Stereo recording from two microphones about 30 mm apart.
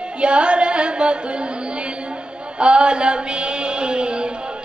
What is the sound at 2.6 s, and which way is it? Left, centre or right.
Mantra, right.